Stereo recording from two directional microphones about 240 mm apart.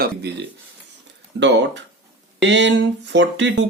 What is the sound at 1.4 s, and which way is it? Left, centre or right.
Speech, right.